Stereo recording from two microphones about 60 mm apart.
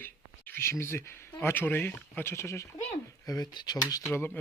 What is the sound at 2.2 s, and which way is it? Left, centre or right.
Speech, left.